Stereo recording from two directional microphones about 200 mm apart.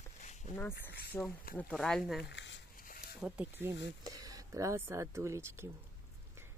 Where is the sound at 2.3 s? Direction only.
60° left (ahead or behind).